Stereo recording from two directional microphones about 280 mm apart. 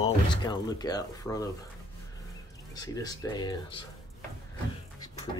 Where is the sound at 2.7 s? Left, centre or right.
Centre.